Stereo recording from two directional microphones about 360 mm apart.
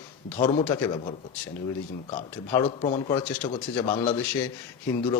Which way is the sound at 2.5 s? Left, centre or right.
Centre.